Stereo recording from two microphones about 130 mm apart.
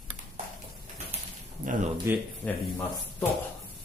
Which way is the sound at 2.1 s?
20° right (ahead or behind).